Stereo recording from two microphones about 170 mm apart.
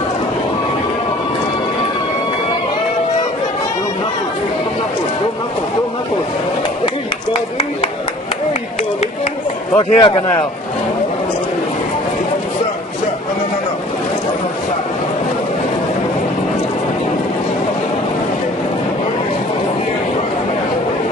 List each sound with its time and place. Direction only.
9.9 s a man's voice: 30° left (ahead or behind)